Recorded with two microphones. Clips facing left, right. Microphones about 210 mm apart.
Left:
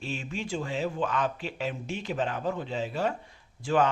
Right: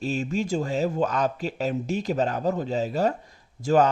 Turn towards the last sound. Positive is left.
turn(degrees=-40)  # may be behind; listen again after turning